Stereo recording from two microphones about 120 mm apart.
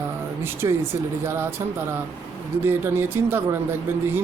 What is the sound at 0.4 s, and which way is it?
Speech, 20° right (ahead or behind).